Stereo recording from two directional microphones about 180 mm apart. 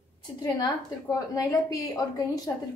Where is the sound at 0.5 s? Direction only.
20° left (ahead or behind).